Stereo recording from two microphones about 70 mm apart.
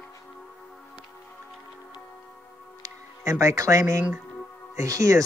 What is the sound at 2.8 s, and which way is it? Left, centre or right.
Speech, right.